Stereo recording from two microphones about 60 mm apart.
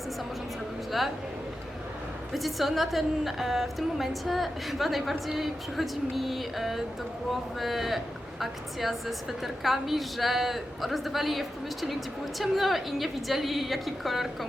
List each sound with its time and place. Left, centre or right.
0.9 s speech: centre
2.3 s speech: centre